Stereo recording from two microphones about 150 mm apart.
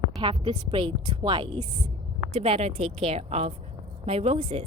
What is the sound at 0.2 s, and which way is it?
A woman's voice, 35° right (ahead or behind).